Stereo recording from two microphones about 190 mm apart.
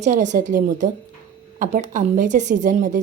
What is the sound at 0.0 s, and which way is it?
Speech, 40° right (ahead or behind).